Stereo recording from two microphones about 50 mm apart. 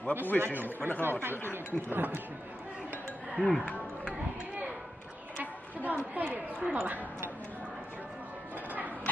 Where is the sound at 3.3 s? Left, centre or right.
Centre.